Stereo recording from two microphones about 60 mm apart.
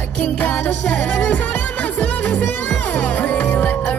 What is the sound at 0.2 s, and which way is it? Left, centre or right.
Music, left.